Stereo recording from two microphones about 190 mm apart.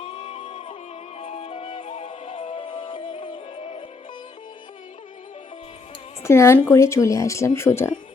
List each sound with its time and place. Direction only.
0.0 s music: 30° left (ahead or behind)
6.2 s speech: 15° left (ahead or behind)